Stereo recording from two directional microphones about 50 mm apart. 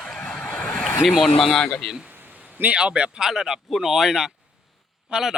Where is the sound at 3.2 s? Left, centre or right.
Centre.